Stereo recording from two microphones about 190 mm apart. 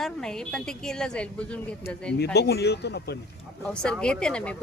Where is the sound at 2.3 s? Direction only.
60° left (ahead or behind).